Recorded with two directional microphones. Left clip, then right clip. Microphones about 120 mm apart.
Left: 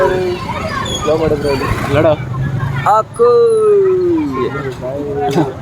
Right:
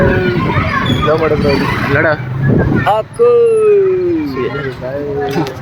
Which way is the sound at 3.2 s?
15° left (ahead or behind).